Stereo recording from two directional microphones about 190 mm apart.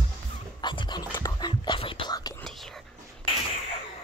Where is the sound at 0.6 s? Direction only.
25° left (ahead or behind).